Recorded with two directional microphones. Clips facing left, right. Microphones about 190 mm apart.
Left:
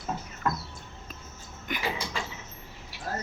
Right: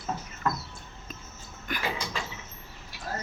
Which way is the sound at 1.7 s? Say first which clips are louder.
Even; 20° left (ahead or behind).